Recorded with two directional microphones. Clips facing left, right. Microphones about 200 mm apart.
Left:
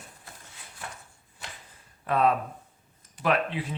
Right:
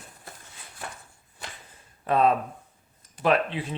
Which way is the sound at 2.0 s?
25° right (ahead or behind).